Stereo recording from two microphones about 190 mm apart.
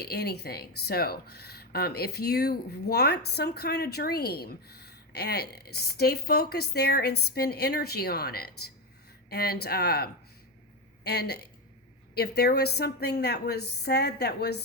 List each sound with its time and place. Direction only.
0.0 s speech: 60° left (ahead or behind)